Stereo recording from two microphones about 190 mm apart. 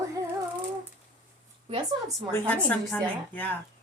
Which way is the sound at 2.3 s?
10° left (ahead or behind).